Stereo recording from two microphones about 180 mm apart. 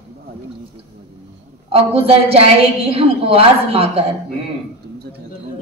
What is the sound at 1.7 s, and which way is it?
A woman's voice, 30° right (ahead or behind).